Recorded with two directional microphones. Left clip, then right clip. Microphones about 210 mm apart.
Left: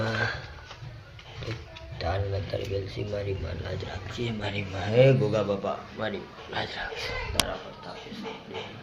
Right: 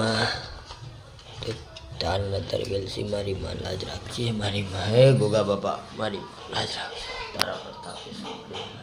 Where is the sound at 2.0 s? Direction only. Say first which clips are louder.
Right 4 dB; 20° right (ahead or behind).